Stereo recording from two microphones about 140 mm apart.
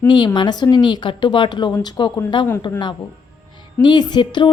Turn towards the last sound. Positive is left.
turn(degrees=35)  # may be behind; listen again after turning